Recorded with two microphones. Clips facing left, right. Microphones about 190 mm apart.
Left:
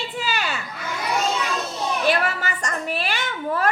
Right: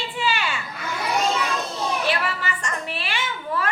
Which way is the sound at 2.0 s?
45° left (ahead or behind).